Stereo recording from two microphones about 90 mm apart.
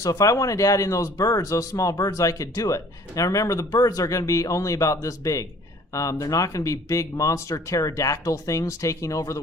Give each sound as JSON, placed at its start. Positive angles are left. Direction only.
{"t": 0.0, "sound": "speech", "side_deg": 40}